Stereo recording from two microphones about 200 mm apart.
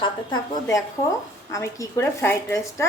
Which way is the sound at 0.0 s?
25° left (ahead or behind).